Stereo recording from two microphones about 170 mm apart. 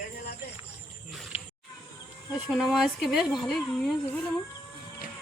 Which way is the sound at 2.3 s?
5° right (ahead or behind).